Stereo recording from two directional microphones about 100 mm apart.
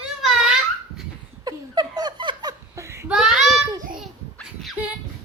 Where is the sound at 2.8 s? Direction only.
30° right (ahead or behind).